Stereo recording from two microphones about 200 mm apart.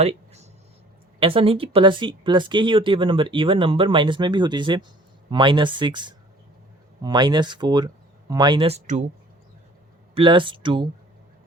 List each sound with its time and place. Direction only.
0.0 s a sound: 30° right (ahead or behind)
1.2 s speech: 25° right (ahead or behind)
10.2 s speech: 25° right (ahead or behind)